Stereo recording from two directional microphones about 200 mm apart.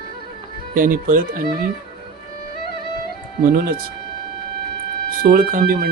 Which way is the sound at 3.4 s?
45° right (ahead or behind).